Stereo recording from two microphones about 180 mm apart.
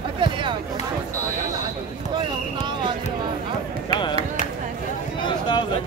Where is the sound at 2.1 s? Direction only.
25° right (ahead or behind).